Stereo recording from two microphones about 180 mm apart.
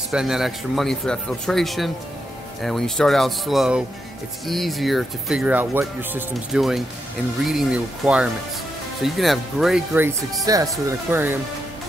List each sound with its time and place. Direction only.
0.1 s speech: centre (ahead or behind)
9.9 s speech: 15° right (ahead or behind)